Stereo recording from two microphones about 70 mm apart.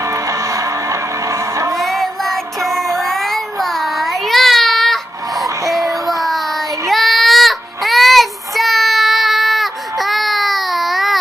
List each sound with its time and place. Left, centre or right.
0.0 s music: right
1.8 s music: centre
3.0 s child singing: centre
5.6 s child singing: right
6.0 s child singing: centre